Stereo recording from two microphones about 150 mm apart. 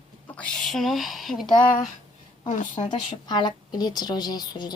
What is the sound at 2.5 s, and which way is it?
Speech, 55° left (ahead or behind).